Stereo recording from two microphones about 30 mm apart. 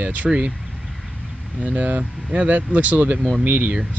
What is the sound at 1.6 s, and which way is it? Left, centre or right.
Speech, right.